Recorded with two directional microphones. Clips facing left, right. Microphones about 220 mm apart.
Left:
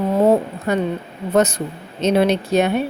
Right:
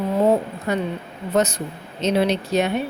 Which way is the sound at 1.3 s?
50° left (ahead or behind).